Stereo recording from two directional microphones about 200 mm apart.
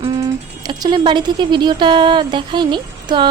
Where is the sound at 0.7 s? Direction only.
20° right (ahead or behind).